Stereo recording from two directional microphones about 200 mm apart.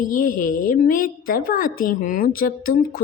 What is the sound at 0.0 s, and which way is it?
A woman's voice, 40° left (ahead or behind).